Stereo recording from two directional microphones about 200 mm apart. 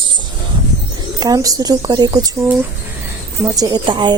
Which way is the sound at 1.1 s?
20° right (ahead or behind).